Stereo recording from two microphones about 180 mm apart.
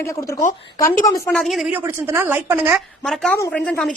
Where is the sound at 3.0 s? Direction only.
Centre (ahead or behind).